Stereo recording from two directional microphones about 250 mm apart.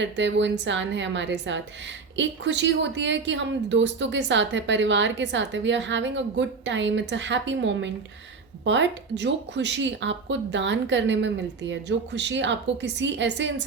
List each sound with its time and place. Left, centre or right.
0.0 s a woman's voice: right